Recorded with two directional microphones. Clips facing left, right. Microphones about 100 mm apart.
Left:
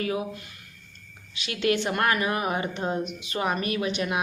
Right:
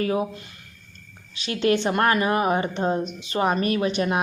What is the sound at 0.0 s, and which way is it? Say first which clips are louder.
Speech: right 5 dB; 40° right (ahead or behind).